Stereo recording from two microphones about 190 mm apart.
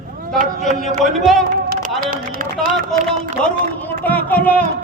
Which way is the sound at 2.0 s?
45° right (ahead or behind).